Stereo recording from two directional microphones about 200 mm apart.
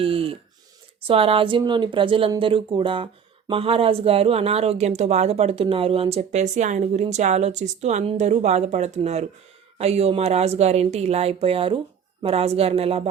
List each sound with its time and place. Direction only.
0.0 s speech: 25° right (ahead or behind)